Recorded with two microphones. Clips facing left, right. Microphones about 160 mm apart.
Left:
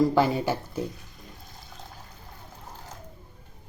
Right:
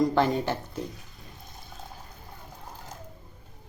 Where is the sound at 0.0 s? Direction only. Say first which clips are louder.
Left 2 dB; 5° left (ahead or behind).